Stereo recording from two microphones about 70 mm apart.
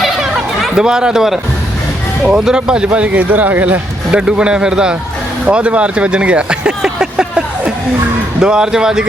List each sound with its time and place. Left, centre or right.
0.0 s chatter: centre
2.2 s speech: centre; by 3.8 s right
4.1 s speech: centre